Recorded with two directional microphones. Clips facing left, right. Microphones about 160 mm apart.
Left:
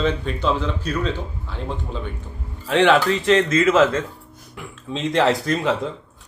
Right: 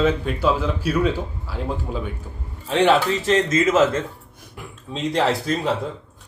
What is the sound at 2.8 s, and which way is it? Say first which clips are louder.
Speech: left 1 dB; 40° right (ahead or behind).